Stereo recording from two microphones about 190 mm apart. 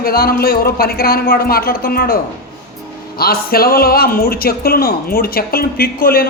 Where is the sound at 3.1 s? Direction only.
50° left (ahead or behind).